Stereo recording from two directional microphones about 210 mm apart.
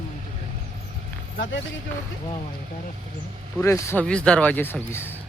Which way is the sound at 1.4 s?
60° left (ahead or behind).